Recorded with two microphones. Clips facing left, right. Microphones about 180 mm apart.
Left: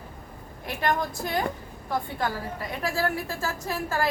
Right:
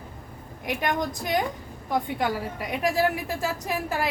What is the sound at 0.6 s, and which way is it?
A woman's voice, 15° right (ahead or behind).